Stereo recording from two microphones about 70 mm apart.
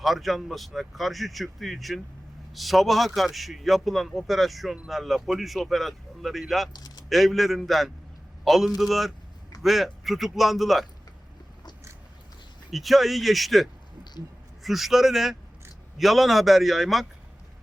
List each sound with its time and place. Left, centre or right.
0.0 s speech: centre
6.7 s speech: left
7.1 s speech: centre
12.7 s speech: centre